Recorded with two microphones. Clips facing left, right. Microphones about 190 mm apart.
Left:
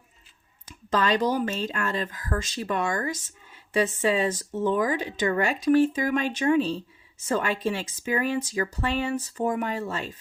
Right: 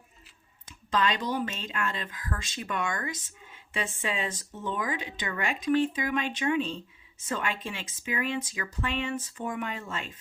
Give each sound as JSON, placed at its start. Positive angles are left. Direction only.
{"t": 0.9, "sound": "speech", "side_deg": 40}